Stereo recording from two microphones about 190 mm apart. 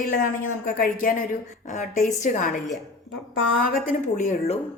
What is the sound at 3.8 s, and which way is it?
Speech, 40° left (ahead or behind).